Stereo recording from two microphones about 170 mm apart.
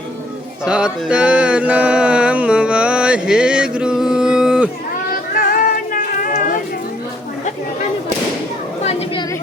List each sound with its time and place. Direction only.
0.6 s mantra: 5° right (ahead or behind)
5.3 s music: 60° left (ahead or behind)
8.8 s chatter: 40° left (ahead or behind)